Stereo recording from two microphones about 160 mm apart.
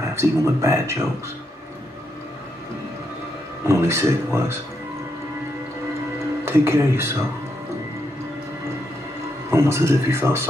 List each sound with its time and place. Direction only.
0.0 s a man's voice: 20° right (ahead or behind)
3.6 s speech: 15° right (ahead or behind)
6.4 s speech: 15° right (ahead or behind)
9.5 s speech: 15° right (ahead or behind)